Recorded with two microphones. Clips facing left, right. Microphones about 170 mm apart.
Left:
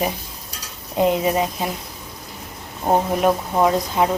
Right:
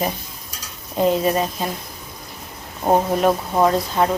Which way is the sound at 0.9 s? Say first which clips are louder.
Even; 15° left (ahead or behind).